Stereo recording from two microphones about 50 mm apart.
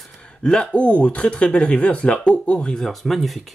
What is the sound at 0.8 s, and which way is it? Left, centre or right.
Speech, left.